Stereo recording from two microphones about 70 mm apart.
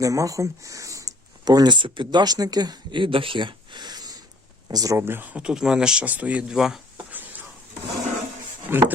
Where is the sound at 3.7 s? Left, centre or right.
Right.